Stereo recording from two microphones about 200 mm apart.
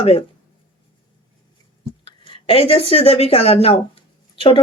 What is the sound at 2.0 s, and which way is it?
Speech, 25° left (ahead or behind).